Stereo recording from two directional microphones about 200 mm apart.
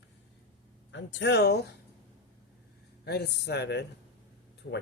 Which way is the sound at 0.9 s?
65° left (ahead or behind).